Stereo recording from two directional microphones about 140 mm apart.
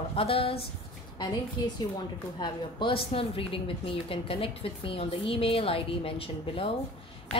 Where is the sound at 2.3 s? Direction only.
35° left (ahead or behind).